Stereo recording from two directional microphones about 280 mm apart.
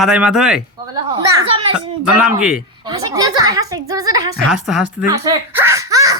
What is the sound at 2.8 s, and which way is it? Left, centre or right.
A woman's voice, centre.